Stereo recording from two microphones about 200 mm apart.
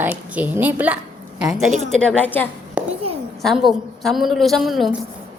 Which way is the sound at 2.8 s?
5° right (ahead or behind).